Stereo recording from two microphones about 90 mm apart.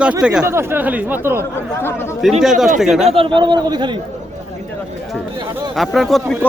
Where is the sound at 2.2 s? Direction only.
5° right (ahead or behind).